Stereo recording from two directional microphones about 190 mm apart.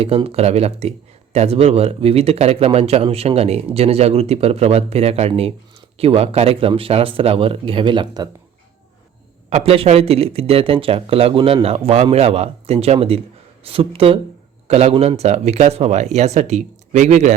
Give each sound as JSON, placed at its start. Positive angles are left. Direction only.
{"t": 0.0, "sound": "speech", "side_deg": -30}
{"t": 9.5, "sound": "speech", "side_deg": -30}